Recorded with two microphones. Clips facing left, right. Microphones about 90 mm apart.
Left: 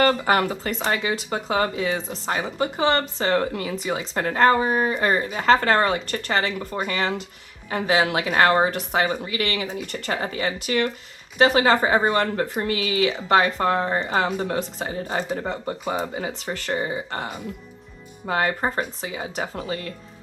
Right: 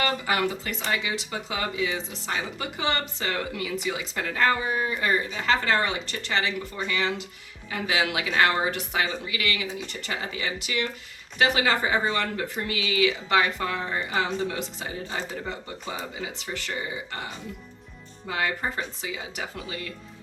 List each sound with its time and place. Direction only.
0.0 s speech: 45° left (ahead or behind)